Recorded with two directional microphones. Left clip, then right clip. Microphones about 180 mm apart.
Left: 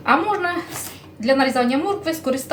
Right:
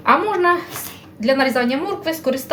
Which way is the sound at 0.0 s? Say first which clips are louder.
Right 3 dB; 30° right (ahead or behind).